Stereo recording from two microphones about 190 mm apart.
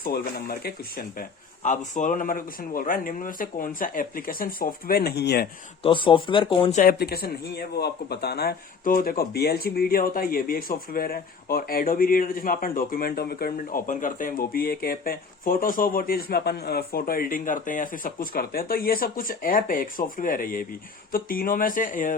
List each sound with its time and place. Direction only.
0.0 s speech: 50° left (ahead or behind)
1.6 s speech: 40° left (ahead or behind); by 5.5 s 60° left (ahead or behind)
5.8 s speech: 25° left (ahead or behind)
6.7 s speech: 50° left (ahead or behind)